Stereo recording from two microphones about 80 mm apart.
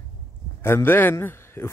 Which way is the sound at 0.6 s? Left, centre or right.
Left.